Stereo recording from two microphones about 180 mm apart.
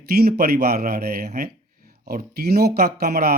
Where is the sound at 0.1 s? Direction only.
60° right (ahead or behind).